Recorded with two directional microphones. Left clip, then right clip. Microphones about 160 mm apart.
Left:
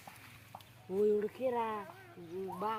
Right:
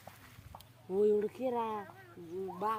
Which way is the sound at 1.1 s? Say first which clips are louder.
Right 1 dB; 55° right (ahead or behind).